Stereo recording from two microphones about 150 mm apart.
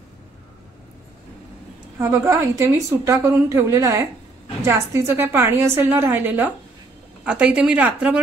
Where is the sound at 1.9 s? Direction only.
20° right (ahead or behind).